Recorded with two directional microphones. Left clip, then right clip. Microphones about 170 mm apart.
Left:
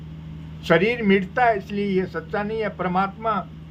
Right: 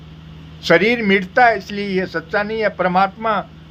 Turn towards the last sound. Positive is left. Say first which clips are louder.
# right 6 dB
turn(degrees=-15)  # may be behind; listen again after turning